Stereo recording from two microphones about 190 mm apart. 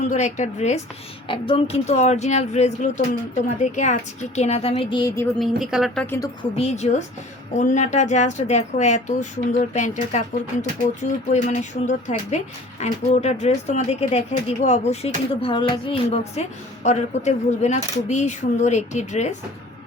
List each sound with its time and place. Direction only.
0.1 s speech: 40° left (ahead or behind)
1.3 s speech: 30° left (ahead or behind)
5.4 s a woman's voice: centre (ahead or behind)
6.6 s speech: 35° left (ahead or behind)